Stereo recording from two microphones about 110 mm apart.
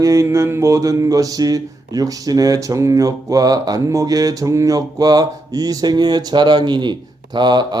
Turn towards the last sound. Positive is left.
turn(degrees=-40)  # may be behind; listen again after turning